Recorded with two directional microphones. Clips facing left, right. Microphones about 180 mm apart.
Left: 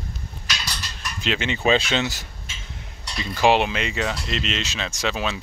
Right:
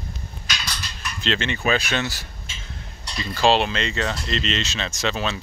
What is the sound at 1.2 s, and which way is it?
Speech, 10° left (ahead or behind).